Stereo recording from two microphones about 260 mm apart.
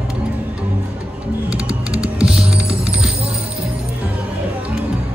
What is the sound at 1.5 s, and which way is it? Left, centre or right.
Music, centre.